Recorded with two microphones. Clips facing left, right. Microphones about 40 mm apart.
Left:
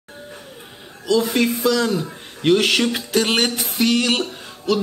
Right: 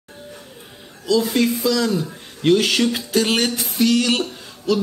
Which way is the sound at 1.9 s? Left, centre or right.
Left.